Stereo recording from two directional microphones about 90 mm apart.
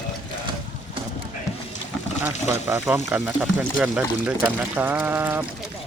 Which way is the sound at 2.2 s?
25° right (ahead or behind).